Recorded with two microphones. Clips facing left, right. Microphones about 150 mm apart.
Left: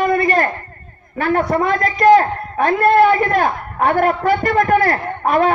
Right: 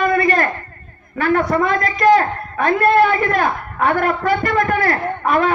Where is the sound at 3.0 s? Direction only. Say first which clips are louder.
Left 2 dB; 35° left (ahead or behind).